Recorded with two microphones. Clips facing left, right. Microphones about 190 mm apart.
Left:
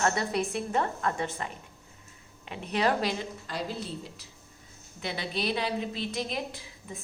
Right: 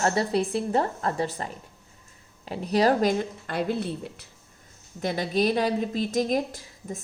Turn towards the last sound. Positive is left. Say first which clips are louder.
# right 5 dB
turn(degrees=-45)  # may be behind; listen again after turning